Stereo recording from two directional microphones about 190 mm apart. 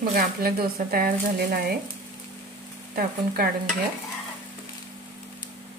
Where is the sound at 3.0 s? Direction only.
50° right (ahead or behind).